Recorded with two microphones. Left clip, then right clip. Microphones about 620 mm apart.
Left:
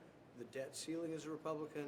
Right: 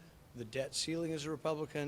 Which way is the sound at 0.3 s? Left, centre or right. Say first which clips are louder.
Right 9 dB; right.